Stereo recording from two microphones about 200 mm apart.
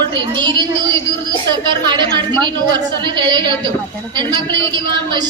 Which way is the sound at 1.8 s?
20° right (ahead or behind).